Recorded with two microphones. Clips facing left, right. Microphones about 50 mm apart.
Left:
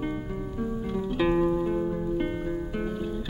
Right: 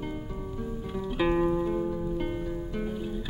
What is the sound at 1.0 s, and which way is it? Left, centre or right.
Music, centre.